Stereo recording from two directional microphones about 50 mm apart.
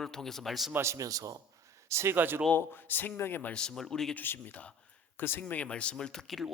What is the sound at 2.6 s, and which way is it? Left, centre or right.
Speech, left.